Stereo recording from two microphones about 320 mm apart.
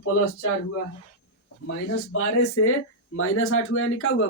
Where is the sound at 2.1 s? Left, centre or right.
Left.